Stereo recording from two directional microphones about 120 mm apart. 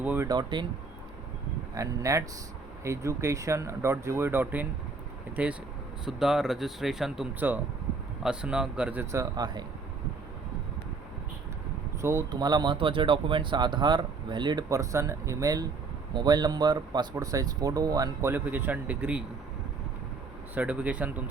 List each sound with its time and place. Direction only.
0.0 s speech: 15° right (ahead or behind)
0.3 s speech: 35° right (ahead or behind)
1.7 s speech: 25° right (ahead or behind); by 7.3 s 5° right (ahead or behind)
7.3 s speech: 15° right (ahead or behind)
9.1 s speech: 35° right (ahead or behind)
12.0 s speech: 30° right (ahead or behind)
14.7 s speech: 25° right (ahead or behind)
18.3 s speech: 15° right (ahead or behind)
20.6 s speech: 10° right (ahead or behind)